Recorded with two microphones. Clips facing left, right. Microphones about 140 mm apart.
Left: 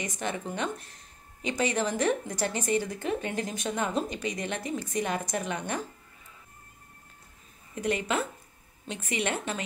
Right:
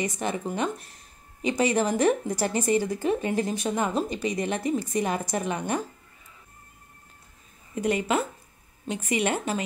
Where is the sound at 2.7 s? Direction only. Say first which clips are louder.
Right 4 dB; 35° right (ahead or behind).